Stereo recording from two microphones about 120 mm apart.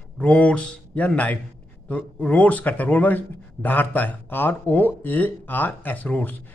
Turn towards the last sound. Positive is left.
turn(degrees=15)  # may be behind; listen again after turning